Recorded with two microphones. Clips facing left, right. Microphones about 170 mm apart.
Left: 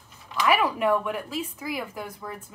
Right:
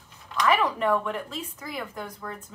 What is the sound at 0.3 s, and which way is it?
A woman's voice, 10° left (ahead or behind).